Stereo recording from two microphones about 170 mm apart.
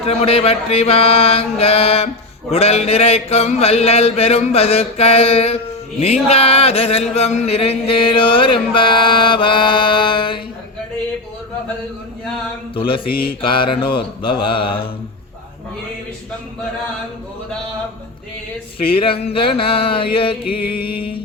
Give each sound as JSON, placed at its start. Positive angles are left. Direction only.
{"t": 0.0, "sound": "mantra", "side_deg": 35}
{"t": 12.7, "sound": "mantra", "side_deg": 30}
{"t": 18.9, "sound": "mantra", "side_deg": 30}
{"t": 20.8, "sound": "music", "side_deg": 65}